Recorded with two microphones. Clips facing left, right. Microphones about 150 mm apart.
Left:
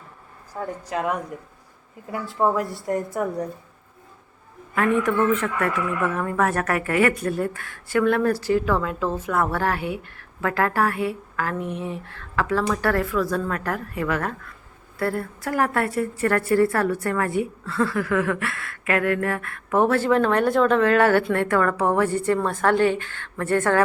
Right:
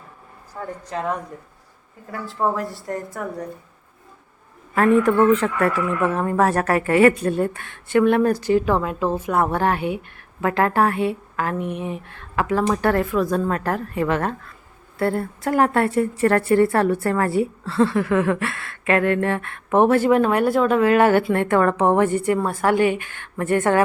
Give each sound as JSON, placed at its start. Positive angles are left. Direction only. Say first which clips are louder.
{"t": 0.6, "sound": "a woman's voice", "louder": "left 1 dB", "side_deg": 10}
{"t": 2.4, "sound": "a woman's voice", "louder": "left 1 dB", "side_deg": 5}
{"t": 4.7, "sound": "a woman's voice", "louder": "right 5 dB", "side_deg": -35}